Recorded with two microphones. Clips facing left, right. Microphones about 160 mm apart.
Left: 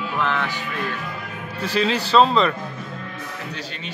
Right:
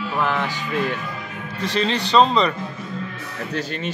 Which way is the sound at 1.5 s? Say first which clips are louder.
Left 1 dB; 10° left (ahead or behind).